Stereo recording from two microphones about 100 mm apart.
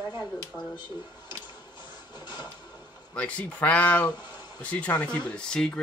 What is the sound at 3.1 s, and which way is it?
Speech, 10° left (ahead or behind).